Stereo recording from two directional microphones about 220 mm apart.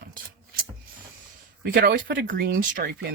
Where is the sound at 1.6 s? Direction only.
40° right (ahead or behind).